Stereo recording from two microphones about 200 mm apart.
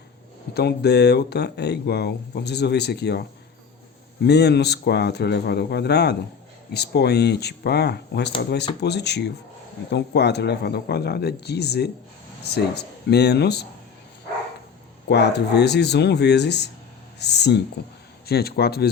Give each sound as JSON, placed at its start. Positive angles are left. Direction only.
{"t": 0.5, "sound": "speech", "side_deg": 55}
{"t": 15.1, "sound": "speech", "side_deg": 55}